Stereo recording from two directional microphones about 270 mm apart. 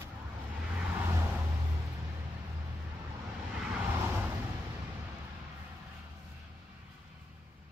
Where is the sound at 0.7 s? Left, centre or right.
Centre.